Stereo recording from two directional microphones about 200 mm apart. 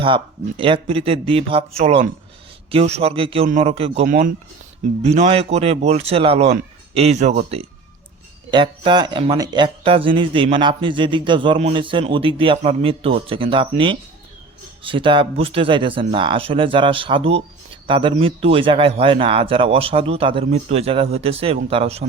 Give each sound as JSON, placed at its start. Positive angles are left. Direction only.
{"t": 0.0, "sound": "speech", "side_deg": -25}
{"t": 4.0, "sound": "speech", "side_deg": -45}
{"t": 5.0, "sound": "speech", "side_deg": -35}